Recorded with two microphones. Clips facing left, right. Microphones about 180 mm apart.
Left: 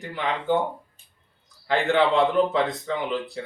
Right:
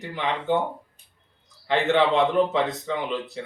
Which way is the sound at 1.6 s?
20° right (ahead or behind).